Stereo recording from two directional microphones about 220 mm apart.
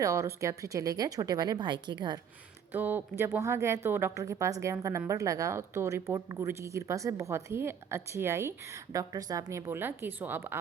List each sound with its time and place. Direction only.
0.0 s speech: 15° right (ahead or behind)
2.7 s speech: 10° right (ahead or behind)